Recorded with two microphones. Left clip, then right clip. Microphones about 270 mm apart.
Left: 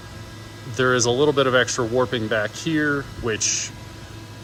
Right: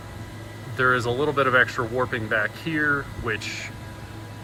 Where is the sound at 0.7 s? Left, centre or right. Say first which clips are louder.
Left 2 dB; centre.